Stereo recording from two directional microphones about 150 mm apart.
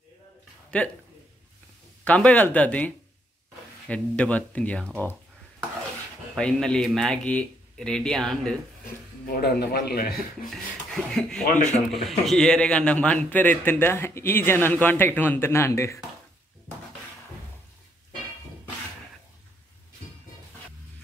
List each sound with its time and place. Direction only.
0.7 s speech: 10° left (ahead or behind)
2.0 s a man's voice: 10° left (ahead or behind)
6.3 s speech: 5° left (ahead or behind)
9.2 s speech: 85° left
11.1 s a man's voice: 5° left (ahead or behind); by 16.0 s 20° left (ahead or behind)